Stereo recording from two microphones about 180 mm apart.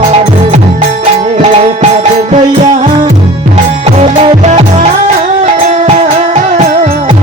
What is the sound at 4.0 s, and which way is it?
Music, 40° right (ahead or behind).